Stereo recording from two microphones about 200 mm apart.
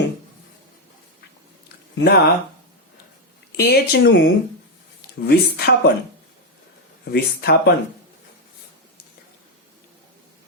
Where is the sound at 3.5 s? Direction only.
50° left (ahead or behind).